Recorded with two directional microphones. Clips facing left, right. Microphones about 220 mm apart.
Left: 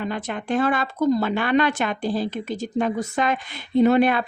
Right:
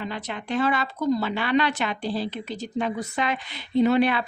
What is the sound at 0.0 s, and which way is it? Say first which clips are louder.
A woman's voice: left 4 dB; 50° left (ahead or behind).